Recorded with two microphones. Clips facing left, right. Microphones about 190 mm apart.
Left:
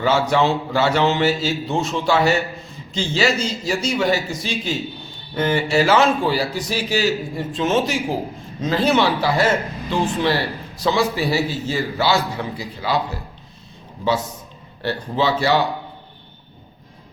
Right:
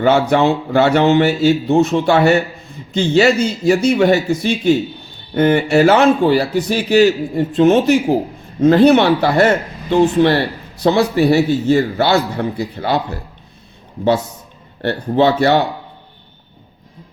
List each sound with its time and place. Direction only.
0.0 s speech: 55° right (ahead or behind)
14.8 s speech: 60° right (ahead or behind)